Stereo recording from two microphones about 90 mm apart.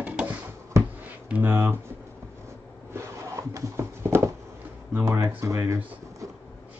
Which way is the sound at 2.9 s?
35° right (ahead or behind).